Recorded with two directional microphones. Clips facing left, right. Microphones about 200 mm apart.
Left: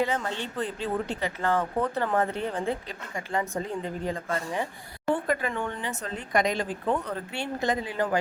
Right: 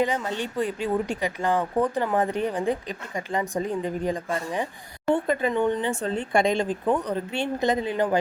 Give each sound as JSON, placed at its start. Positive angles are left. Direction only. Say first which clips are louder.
{"t": 0.0, "sound": "speech", "louder": "right 3 dB", "side_deg": -15}